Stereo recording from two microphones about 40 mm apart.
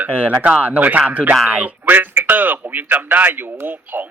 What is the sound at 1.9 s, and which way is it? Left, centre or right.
A man's voice, right.